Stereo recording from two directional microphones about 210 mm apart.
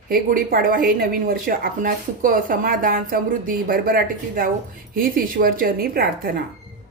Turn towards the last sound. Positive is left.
turn(degrees=-45)  # may be behind; listen again after turning